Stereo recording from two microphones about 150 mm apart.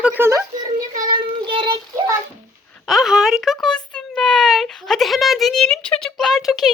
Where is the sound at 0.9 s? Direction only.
30° right (ahead or behind).